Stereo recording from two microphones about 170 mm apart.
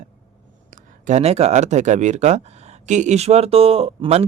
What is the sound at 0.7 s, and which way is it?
Speech, 50° right (ahead or behind).